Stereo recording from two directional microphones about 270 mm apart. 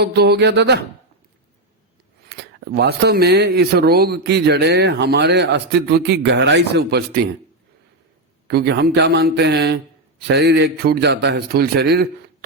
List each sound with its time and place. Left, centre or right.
0.0 s speech: right
2.3 s speech: right
8.4 s speech: right